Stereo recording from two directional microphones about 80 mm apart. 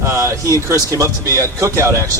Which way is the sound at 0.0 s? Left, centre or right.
Right.